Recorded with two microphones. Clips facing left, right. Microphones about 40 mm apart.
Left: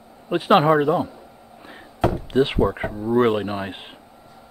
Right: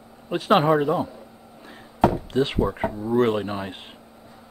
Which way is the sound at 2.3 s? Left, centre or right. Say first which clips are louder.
Left 3 dB; centre.